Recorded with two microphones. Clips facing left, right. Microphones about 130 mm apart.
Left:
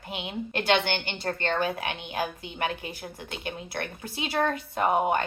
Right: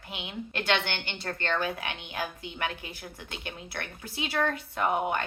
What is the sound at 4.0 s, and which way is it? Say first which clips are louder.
A woman's voice: left 2 dB; 35° left (ahead or behind).